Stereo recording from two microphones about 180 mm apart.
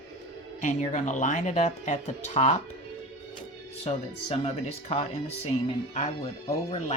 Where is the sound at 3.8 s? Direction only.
35° left (ahead or behind).